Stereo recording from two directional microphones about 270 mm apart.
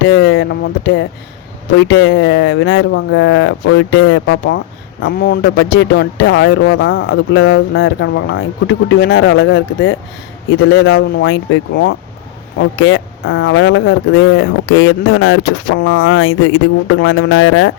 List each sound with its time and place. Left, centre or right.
0.0 s speech: left
5.0 s speech: left